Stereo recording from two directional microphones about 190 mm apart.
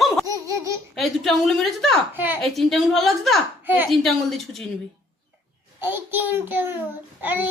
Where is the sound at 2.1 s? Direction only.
10° right (ahead or behind).